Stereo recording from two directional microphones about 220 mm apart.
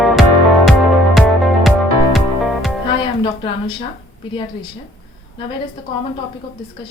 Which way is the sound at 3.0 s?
20° left (ahead or behind).